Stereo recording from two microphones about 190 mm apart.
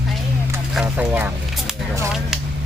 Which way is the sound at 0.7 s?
5° right (ahead or behind).